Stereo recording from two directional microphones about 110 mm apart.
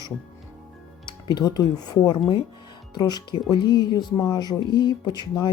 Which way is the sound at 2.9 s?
40° left (ahead or behind).